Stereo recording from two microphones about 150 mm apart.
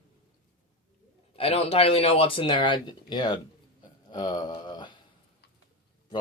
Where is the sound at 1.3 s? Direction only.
40° left (ahead or behind).